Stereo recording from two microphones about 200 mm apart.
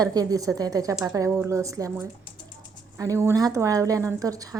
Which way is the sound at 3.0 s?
15° right (ahead or behind).